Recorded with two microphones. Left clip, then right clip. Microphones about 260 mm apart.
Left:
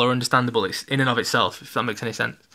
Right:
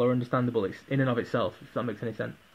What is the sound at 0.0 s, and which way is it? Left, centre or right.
Speech, left.